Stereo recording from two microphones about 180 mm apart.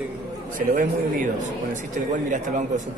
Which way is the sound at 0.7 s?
50° right (ahead or behind).